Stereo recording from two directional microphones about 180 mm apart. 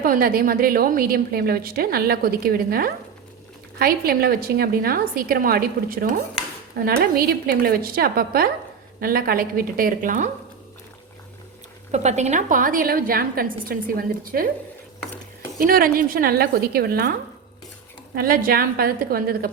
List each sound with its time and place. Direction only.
0.0 s a woman's voice: 55° right (ahead or behind)
11.9 s a woman's voice: 40° right (ahead or behind)
15.5 s a woman's voice: 55° right (ahead or behind)